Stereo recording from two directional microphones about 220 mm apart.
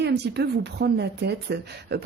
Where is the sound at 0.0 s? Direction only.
50° right (ahead or behind).